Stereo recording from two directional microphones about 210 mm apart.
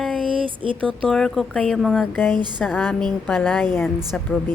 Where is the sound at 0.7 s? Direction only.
5° left (ahead or behind).